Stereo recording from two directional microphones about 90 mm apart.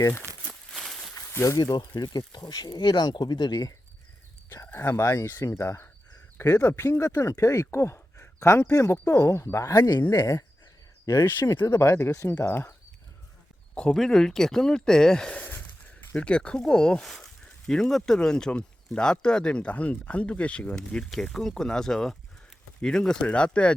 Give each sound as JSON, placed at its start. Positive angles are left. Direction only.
{"t": 0.0, "sound": "speech", "side_deg": 25}
{"t": 0.7, "sound": "walk", "side_deg": 0}
{"t": 1.3, "sound": "speech", "side_deg": 30}
{"t": 1.5, "sound": "speech", "side_deg": 45}
{"t": 4.6, "sound": "speech", "side_deg": 25}
{"t": 13.7, "sound": "speech", "side_deg": 5}